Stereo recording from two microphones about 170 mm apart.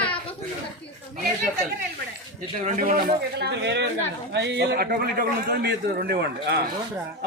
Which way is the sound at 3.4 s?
90° right.